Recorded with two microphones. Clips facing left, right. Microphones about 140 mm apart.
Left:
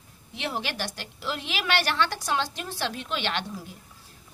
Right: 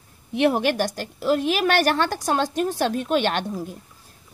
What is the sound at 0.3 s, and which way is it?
A woman's voice, 55° right (ahead or behind).